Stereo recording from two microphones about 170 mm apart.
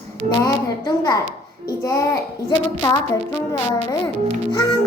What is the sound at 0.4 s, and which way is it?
A child's voice, 20° left (ahead or behind).